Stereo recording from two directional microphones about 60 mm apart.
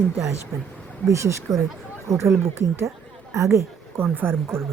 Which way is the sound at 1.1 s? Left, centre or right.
Right.